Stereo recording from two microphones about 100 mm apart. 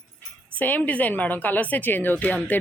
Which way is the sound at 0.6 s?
15° left (ahead or behind).